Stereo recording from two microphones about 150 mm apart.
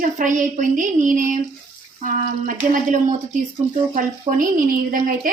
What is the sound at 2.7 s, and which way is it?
A woman's voice, 60° right (ahead or behind).